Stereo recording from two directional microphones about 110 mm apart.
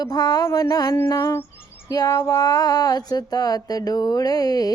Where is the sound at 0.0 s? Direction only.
35° left (ahead or behind).